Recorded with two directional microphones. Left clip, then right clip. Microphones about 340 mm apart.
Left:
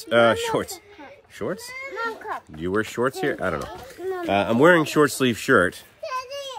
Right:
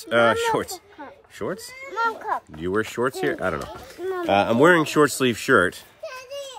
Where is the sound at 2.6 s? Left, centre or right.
Centre.